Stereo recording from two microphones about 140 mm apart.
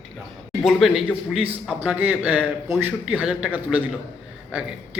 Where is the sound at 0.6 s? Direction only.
Centre (ahead or behind).